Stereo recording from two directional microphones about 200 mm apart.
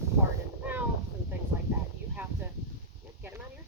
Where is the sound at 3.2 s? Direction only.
10° right (ahead or behind).